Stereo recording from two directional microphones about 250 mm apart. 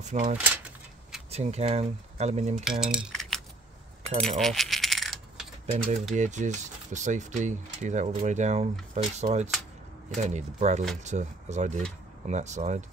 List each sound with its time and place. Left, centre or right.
0.0 s speech: right
2.6 s cutlery: centre
4.0 s coin: centre
6.1 s speech: right